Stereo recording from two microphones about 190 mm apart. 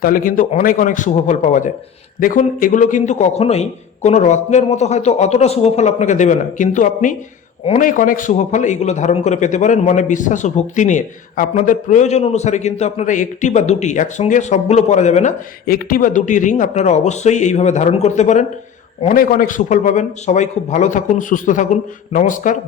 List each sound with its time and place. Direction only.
0.0 s a man's voice: 50° left (ahead or behind)